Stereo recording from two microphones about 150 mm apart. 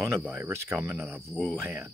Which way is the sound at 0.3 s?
20° right (ahead or behind).